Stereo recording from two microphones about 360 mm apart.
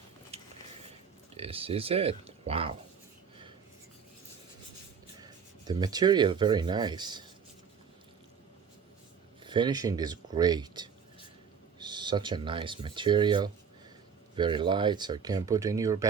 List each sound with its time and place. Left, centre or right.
0.3 s a sound: centre
1.4 s speech: centre
5.2 s speech: centre
9.4 s speech: centre